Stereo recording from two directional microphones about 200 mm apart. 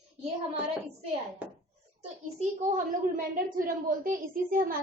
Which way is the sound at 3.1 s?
45° right (ahead or behind).